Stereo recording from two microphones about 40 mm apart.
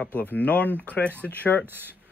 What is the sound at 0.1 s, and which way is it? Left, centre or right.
Speech, left.